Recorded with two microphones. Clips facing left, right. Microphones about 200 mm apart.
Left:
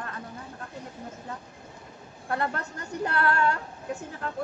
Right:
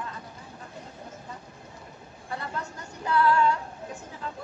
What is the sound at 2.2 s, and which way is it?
A woman's voice, 60° left (ahead or behind).